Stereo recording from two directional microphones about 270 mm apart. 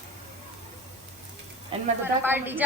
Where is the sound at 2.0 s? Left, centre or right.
Centre.